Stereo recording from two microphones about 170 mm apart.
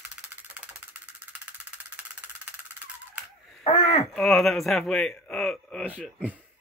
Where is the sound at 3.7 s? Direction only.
30° left (ahead or behind).